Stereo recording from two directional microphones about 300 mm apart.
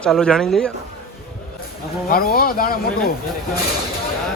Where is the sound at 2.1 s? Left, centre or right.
Left.